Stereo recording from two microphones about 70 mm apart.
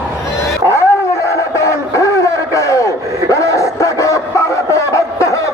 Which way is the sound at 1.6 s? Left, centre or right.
Left.